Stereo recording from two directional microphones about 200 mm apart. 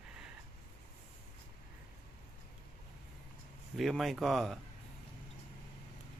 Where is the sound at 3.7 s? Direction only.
Centre (ahead or behind).